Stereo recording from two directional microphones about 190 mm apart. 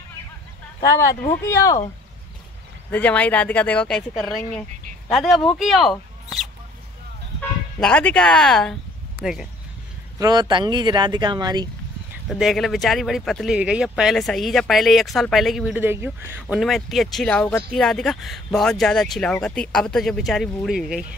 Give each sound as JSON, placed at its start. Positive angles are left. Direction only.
{"t": 0.7, "sound": "speech", "side_deg": 20}
{"t": 2.9, "sound": "speech", "side_deg": 10}
{"t": 7.3, "sound": "speech", "side_deg": 5}
{"t": 10.1, "sound": "speech", "side_deg": -20}
{"t": 12.3, "sound": "speech", "side_deg": 0}